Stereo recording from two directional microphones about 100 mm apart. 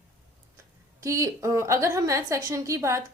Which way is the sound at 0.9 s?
30° right (ahead or behind).